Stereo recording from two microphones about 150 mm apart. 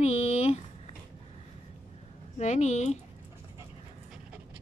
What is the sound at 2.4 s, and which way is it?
Speech, 50° left (ahead or behind).